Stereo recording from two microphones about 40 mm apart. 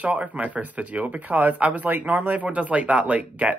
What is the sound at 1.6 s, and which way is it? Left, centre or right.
Speech, right.